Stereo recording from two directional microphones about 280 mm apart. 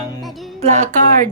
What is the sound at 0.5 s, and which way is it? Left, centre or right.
Speech, right.